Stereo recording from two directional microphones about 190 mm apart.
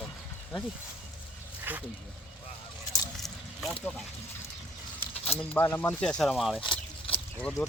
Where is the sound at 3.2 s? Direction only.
Centre (ahead or behind).